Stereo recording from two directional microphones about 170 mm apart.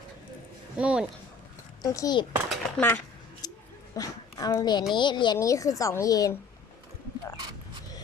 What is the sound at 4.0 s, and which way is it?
A woman's voice, 20° left (ahead or behind).